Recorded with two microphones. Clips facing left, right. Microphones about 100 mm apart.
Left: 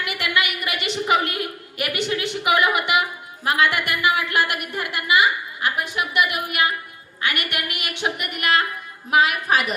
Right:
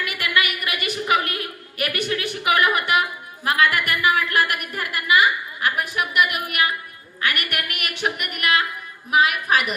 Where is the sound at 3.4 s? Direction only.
25° left (ahead or behind).